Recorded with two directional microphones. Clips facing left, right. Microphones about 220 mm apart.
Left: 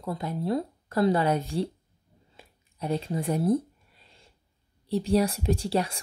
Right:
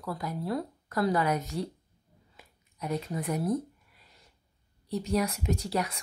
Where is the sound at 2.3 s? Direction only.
30° left (ahead or behind).